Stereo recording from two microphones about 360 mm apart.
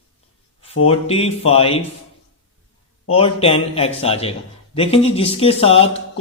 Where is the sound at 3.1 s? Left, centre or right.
Centre.